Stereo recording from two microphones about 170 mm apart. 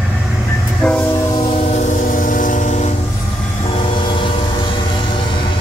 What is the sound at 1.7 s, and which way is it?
Train, 50° left (ahead or behind).